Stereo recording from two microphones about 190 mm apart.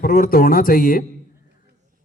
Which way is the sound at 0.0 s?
50° left (ahead or behind).